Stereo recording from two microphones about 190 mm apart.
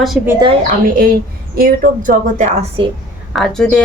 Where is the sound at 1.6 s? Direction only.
50° right (ahead or behind).